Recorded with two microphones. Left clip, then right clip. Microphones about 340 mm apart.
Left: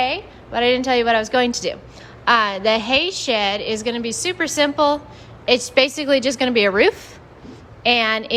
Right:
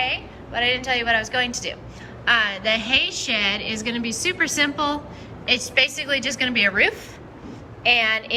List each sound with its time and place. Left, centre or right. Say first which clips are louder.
0.0 s a woman's voice: left 3 dB; centre